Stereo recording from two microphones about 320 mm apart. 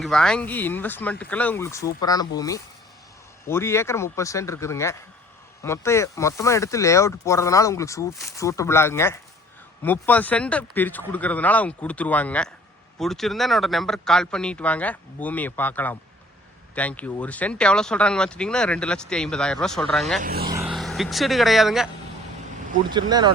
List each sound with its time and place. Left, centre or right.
0.0 s speech: centre
20.2 s speech: right
20.6 s speech: centre
22.9 s speech: centre